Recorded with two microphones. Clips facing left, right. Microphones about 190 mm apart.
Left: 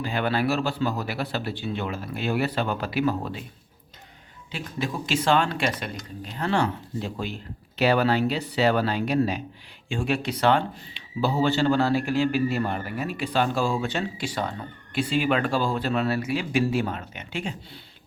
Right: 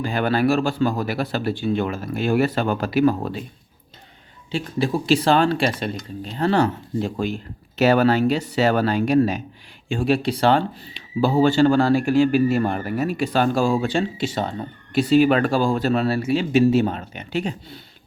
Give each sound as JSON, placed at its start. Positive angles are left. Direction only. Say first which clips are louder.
{"t": 0.0, "sound": "speech", "louder": "right 5 dB", "side_deg": -45}
{"t": 4.5, "sound": "speech", "louder": "right 8 dB", "side_deg": -35}
{"t": 9.9, "sound": "speech", "louder": "right 6 dB", "side_deg": -35}
{"t": 11.2, "sound": "speech", "louder": "right 6 dB", "side_deg": -45}